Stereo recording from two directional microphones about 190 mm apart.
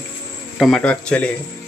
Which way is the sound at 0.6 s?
5° left (ahead or behind).